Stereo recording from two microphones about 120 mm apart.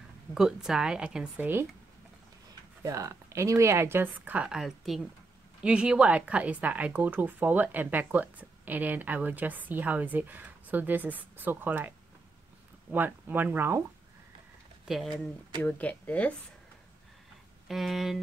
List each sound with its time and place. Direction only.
0.3 s a woman's voice: 5° right (ahead or behind)
2.8 s a woman's voice: 25° right (ahead or behind)
12.9 s a woman's voice: 15° right (ahead or behind)
14.9 s speech: centre (ahead or behind)
15.6 s speech: 15° left (ahead or behind)
17.6 s speech: centre (ahead or behind)